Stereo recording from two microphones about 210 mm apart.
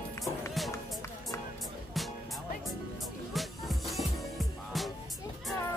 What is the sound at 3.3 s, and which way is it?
Music, centre (ahead or behind).